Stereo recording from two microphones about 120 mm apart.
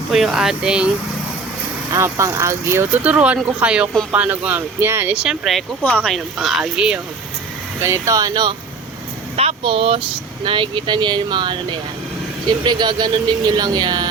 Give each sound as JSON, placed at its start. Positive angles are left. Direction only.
{"t": 0.1, "sound": "speech", "side_deg": -5}
{"t": 1.9, "sound": "speech", "side_deg": -25}
{"t": 5.1, "sound": "speech", "side_deg": -5}
{"t": 5.8, "sound": "speech", "side_deg": 10}
{"t": 7.8, "sound": "speech", "side_deg": -25}
{"t": 9.3, "sound": "speech", "side_deg": -55}
{"t": 12.6, "sound": "speech", "side_deg": -40}